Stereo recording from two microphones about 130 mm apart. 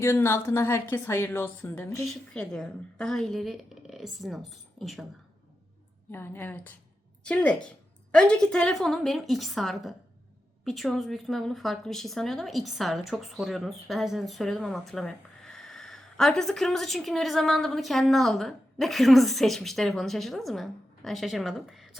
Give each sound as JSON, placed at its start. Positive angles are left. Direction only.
{"t": 0.0, "sound": "a woman's voice", "side_deg": 20}
{"t": 2.3, "sound": "a woman's voice", "side_deg": 5}
{"t": 6.1, "sound": "a woman's voice", "side_deg": 15}